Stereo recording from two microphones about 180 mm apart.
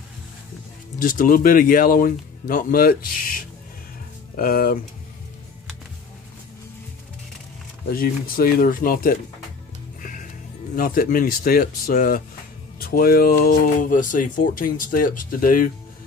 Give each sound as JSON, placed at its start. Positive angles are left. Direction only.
{"t": 0.9, "sound": "speech", "side_deg": 50}
{"t": 7.9, "sound": "speech", "side_deg": 55}
{"t": 10.8, "sound": "speech", "side_deg": 50}